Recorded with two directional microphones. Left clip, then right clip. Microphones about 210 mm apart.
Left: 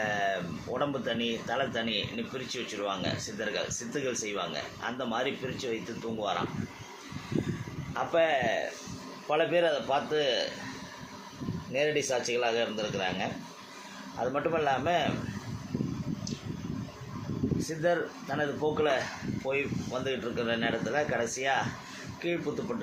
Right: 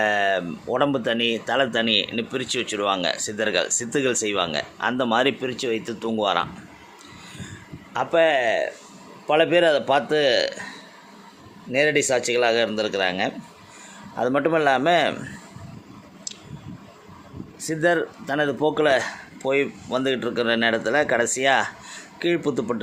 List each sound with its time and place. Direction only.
0.0 s speech: 50° right (ahead or behind)
7.9 s speech: 45° right (ahead or behind)
11.7 s speech: 55° right (ahead or behind)
17.7 s speech: 50° right (ahead or behind)